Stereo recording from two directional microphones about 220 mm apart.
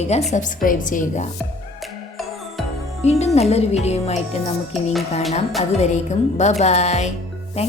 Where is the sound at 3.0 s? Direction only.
30° left (ahead or behind).